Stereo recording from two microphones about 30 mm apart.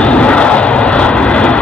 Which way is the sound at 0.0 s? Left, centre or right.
Left.